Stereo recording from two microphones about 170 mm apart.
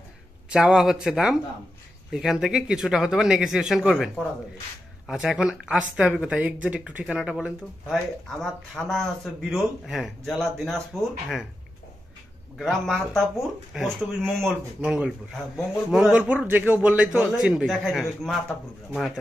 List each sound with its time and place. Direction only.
0.5 s speech: 5° right (ahead or behind)
12.5 s speech: centre (ahead or behind)